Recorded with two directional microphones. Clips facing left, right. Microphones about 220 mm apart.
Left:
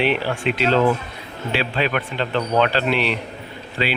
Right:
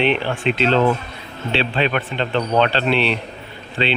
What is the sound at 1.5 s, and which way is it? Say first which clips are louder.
Speech: right 2 dB; 25° right (ahead or behind).